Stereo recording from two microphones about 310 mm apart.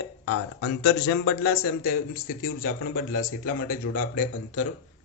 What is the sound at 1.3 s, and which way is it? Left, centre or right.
Speech, left.